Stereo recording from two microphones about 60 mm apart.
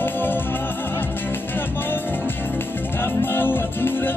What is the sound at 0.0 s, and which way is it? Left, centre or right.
Music, left.